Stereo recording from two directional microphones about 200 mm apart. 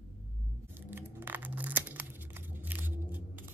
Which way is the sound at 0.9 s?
10° right (ahead or behind).